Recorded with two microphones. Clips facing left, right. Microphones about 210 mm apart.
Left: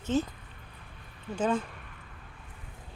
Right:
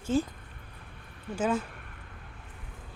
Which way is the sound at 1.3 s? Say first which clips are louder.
Even; 10° right (ahead or behind).